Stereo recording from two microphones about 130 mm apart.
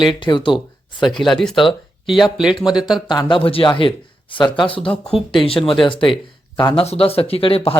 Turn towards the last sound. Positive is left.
turn(degrees=45)  # may be behind; listen again after turning